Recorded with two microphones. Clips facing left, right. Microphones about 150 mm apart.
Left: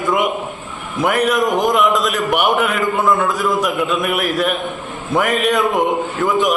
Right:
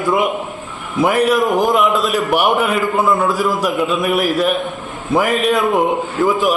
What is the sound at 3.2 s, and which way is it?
A man's voice, centre (ahead or behind).